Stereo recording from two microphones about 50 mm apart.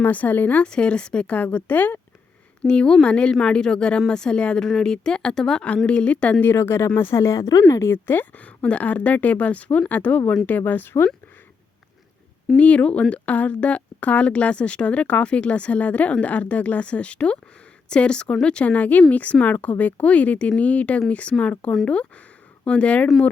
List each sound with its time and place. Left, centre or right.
0.0 s a woman's voice: left
0.6 s a woman's voice: left
2.6 s speech: centre
5.6 s speech: left
6.4 s speech: left
7.7 s speech: left
8.0 s a woman's voice: left
8.4 s a woman's voice: left
12.5 s a woman's voice: left
22.6 s speech: left